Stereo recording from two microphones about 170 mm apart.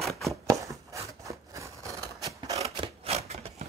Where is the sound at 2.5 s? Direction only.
35° right (ahead or behind).